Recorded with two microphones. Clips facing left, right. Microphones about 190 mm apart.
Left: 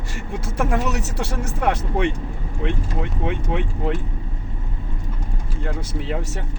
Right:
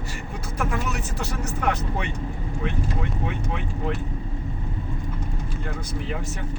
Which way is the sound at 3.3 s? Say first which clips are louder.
Left 5 dB; 60° left (ahead or behind).